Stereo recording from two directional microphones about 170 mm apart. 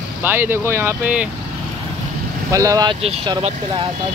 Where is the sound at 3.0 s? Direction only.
35° right (ahead or behind).